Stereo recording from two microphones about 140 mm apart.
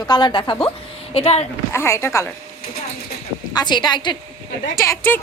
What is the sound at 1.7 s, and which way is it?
Speech, 20° left (ahead or behind).